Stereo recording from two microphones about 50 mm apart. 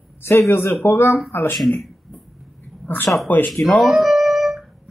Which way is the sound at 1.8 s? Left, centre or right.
Centre.